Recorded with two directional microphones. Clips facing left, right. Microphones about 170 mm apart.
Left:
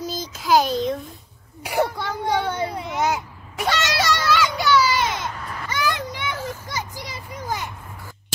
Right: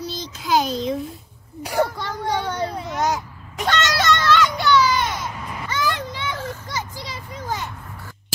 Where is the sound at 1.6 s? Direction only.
10° left (ahead or behind).